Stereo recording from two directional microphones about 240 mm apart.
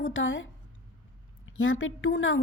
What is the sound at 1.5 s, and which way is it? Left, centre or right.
Speech, left.